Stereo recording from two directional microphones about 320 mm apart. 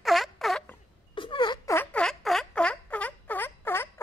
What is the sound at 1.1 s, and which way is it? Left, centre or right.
Turkey, centre.